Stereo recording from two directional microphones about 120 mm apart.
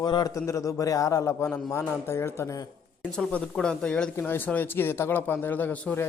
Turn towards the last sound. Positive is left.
turn(degrees=15)  # may be behind; listen again after turning